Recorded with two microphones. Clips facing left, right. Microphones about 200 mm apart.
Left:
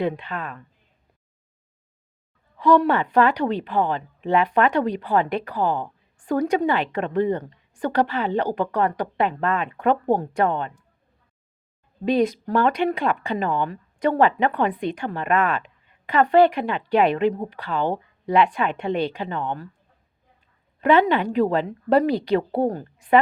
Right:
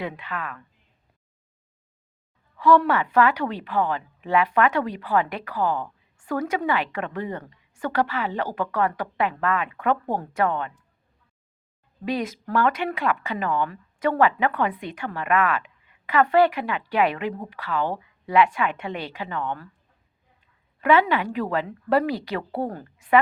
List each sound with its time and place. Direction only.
0.0 s speech: 25° left (ahead or behind)
2.6 s speech: 20° left (ahead or behind)
12.0 s speech: 25° left (ahead or behind)
20.8 s speech: 25° left (ahead or behind)